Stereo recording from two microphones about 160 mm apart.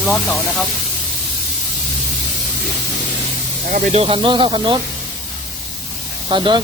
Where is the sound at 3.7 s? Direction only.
50° right (ahead or behind).